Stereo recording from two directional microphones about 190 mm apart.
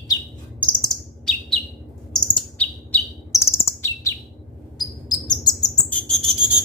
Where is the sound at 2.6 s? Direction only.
10° left (ahead or behind).